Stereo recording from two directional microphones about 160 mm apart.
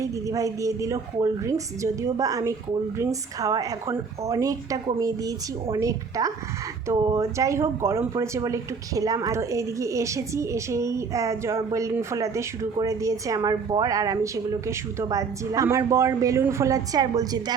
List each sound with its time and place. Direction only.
0.0 s speech: 20° right (ahead or behind)